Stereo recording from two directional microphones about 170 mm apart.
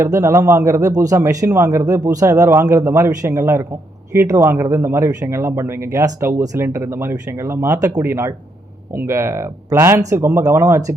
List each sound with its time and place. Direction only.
0.0 s speech: 20° right (ahead or behind)